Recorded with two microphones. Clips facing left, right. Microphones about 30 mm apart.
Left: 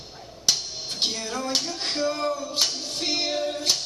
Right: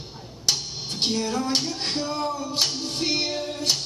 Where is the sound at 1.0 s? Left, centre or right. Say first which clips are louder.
Right 3 dB; centre.